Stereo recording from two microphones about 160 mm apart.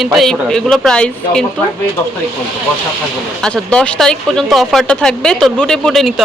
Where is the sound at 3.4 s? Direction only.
5° left (ahead or behind).